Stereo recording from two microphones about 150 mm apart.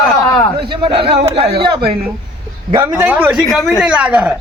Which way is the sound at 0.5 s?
30° right (ahead or behind).